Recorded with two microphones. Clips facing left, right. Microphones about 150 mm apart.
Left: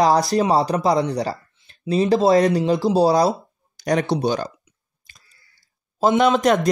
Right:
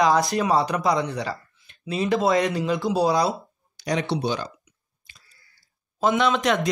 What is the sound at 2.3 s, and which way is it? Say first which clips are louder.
A man's voice: left 6 dB; 45° left (ahead or behind).